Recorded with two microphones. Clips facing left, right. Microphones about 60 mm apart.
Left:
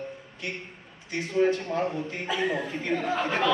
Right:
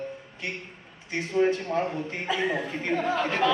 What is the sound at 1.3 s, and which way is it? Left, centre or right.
A man's voice, right.